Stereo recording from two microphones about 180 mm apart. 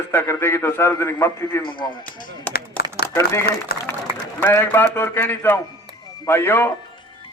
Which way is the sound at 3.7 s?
60° left (ahead or behind).